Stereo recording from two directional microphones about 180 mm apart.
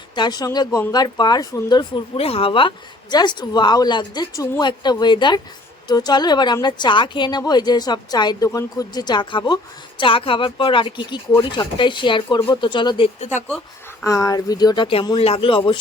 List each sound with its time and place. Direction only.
0.2 s speech: 20° left (ahead or behind)
13.1 s speech: 40° left (ahead or behind)
14.0 s speech: 20° left (ahead or behind)